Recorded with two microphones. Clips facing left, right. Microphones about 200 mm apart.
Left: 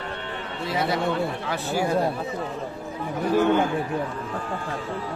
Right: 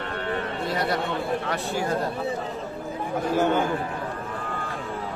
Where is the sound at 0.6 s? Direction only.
Centre (ahead or behind).